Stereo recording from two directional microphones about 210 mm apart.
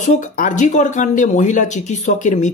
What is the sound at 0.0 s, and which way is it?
Speech, 35° left (ahead or behind).